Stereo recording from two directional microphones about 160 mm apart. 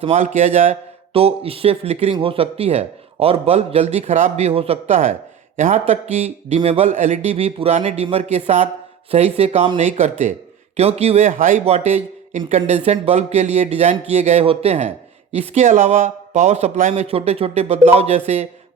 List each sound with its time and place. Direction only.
0.0 s a man's voice: 40° right (ahead or behind)